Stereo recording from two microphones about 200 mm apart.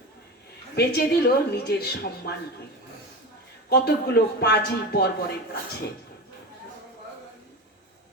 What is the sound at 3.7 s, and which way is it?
A man's voice, 55° left (ahead or behind).